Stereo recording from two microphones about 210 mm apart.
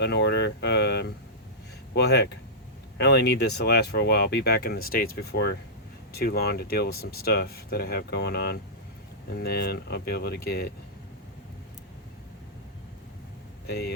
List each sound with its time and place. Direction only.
0.0 s speech: 55° left (ahead or behind)